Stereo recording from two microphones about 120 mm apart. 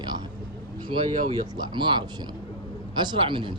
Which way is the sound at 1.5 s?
40° right (ahead or behind).